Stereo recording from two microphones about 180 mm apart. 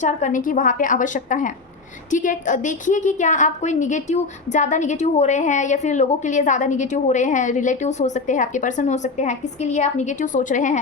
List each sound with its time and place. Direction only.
0.0 s a woman's voice: 45° left (ahead or behind)